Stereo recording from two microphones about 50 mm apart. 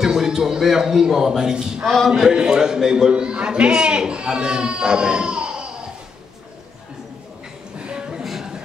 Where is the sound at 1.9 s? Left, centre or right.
Centre.